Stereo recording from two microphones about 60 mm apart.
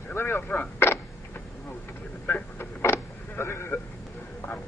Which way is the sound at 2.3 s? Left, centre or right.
Left.